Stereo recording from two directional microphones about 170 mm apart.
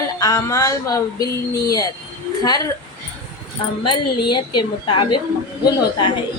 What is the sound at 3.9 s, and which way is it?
Speech, 25° left (ahead or behind).